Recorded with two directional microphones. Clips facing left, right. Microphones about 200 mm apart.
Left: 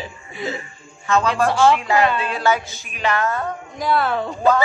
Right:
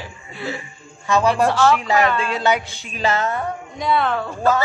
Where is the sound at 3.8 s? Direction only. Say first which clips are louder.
Even; centre (ahead or behind).